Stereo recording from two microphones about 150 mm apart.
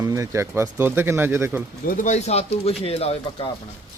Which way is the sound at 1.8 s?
60° left (ahead or behind).